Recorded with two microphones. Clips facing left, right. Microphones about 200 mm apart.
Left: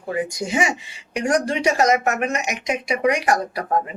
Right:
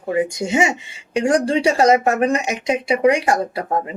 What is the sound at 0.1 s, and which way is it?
Speech, 25° right (ahead or behind).